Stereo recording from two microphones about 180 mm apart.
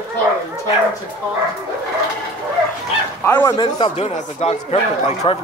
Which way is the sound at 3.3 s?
10° left (ahead or behind).